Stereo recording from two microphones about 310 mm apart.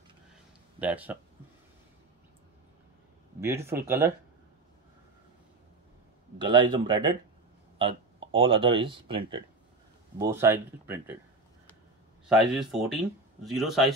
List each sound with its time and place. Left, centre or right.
0.7 s speech: centre
3.3 s speech: centre
6.3 s speech: centre
12.3 s speech: centre